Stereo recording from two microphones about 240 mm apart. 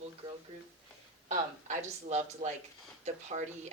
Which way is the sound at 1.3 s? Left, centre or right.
Right.